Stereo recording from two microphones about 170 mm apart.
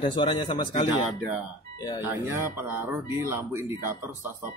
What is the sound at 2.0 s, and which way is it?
Speech, 15° right (ahead or behind).